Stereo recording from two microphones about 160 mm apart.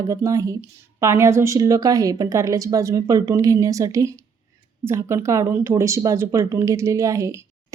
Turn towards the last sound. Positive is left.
turn(degrees=-20)  # may be behind; listen again after turning